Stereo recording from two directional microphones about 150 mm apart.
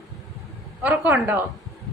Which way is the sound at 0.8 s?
10° right (ahead or behind).